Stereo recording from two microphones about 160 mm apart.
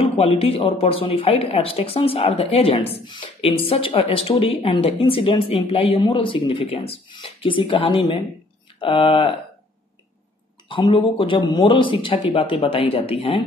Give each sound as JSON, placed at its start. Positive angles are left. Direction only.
{"t": 0.0, "sound": "speech", "side_deg": 40}
{"t": 10.7, "sound": "speech", "side_deg": 35}